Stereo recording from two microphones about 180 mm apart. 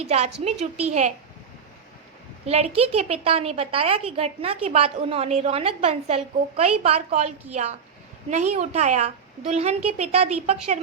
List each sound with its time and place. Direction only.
0.0 s a woman's voice: 35° right (ahead or behind)
2.5 s a woman's voice: 35° right (ahead or behind)